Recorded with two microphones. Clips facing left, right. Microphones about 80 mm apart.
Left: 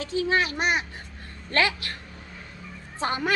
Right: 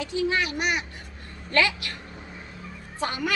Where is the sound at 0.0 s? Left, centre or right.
Left.